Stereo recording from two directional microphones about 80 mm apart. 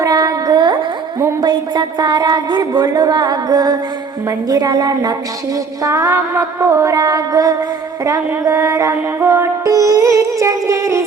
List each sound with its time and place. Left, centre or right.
0.0 s music: right
0.5 s music: right
1.4 s a sound: right
4.3 s music: right
5.8 s music: right